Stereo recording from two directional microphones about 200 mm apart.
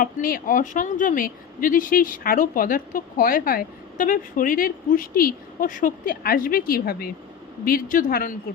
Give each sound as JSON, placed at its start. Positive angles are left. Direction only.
{"t": 0.0, "sound": "a woman's voice", "side_deg": 45}